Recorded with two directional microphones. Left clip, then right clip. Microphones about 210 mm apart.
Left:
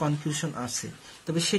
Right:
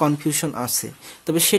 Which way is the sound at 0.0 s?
55° right (ahead or behind).